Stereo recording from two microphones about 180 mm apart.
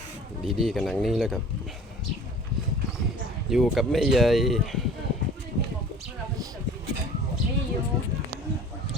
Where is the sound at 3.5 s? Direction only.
Centre (ahead or behind).